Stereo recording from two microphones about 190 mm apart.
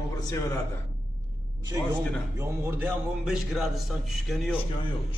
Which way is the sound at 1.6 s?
20° right (ahead or behind).